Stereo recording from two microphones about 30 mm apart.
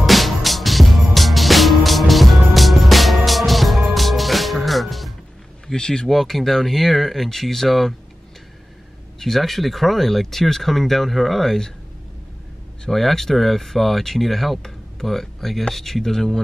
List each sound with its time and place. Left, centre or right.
0.0 s music: centre
5.8 s speech: left
6.0 s speech: centre
9.2 s speech: centre
12.9 s speech: centre